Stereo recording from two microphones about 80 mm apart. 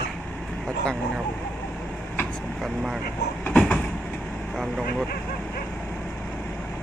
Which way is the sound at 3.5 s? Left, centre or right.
Centre.